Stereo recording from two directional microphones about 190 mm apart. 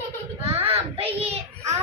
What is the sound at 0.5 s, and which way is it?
Child singing, 30° right (ahead or behind).